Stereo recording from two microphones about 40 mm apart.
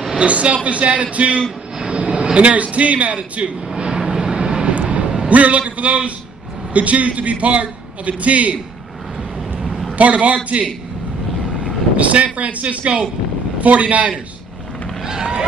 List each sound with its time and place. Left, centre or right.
0.2 s a man's voice: right
3.6 s vehicle: right
5.3 s a man's voice: right
9.6 s a sound: centre
9.9 s a man's voice: right
12.4 s a man's voice: right
15.0 s fireworks: centre